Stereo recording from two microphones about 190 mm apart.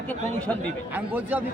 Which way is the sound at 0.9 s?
10° right (ahead or behind).